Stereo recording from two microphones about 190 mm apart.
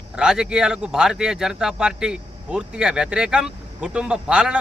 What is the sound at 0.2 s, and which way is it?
Speech, 5° right (ahead or behind).